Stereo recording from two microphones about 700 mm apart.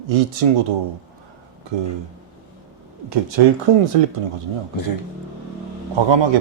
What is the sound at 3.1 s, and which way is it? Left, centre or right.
Speech, right.